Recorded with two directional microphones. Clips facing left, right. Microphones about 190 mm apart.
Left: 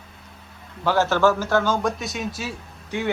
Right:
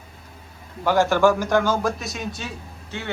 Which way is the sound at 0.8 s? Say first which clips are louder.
Right 1 dB; 15° right (ahead or behind).